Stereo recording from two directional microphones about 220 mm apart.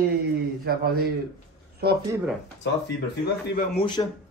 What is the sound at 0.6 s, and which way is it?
Speech, 45° right (ahead or behind).